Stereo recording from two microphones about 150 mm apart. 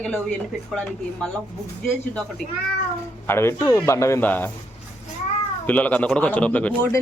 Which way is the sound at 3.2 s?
15° left (ahead or behind).